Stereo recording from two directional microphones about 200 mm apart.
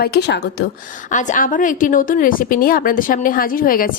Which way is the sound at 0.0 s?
55° left (ahead or behind).